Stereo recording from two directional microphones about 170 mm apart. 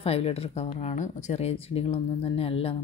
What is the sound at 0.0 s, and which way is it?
Speech, 35° left (ahead or behind).